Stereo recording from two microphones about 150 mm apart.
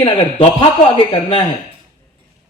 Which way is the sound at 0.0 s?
40° left (ahead or behind).